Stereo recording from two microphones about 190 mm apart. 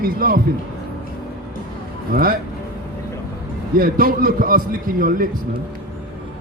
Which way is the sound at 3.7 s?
50° right (ahead or behind).